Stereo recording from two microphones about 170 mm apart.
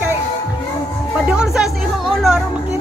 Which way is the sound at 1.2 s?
5° right (ahead or behind).